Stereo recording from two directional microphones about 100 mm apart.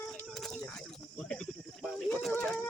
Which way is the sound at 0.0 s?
15° left (ahead or behind).